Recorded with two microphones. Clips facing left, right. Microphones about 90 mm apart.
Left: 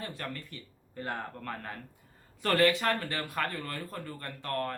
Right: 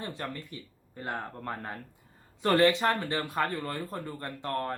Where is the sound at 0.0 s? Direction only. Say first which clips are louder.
Right 2 dB; 20° right (ahead or behind).